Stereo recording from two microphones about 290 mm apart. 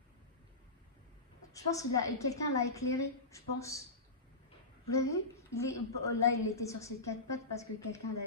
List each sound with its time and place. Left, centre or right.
1.5 s a woman's voice: centre
4.9 s a woman's voice: centre